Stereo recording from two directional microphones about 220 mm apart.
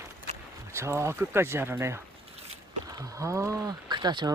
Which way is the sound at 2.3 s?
25° right (ahead or behind).